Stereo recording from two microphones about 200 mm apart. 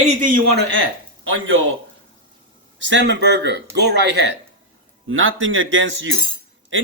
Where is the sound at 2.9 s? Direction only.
60° right (ahead or behind).